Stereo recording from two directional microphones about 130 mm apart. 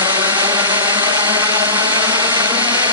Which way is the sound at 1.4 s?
35° right (ahead or behind).